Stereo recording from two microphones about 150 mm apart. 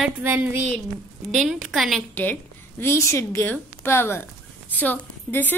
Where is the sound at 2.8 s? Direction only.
15° left (ahead or behind).